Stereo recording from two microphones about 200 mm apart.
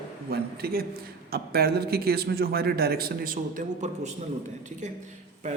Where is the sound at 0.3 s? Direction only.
50° right (ahead or behind).